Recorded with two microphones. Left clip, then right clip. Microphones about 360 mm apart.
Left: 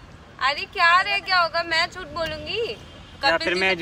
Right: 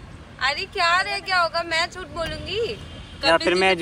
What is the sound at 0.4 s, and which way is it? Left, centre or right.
Speech, left.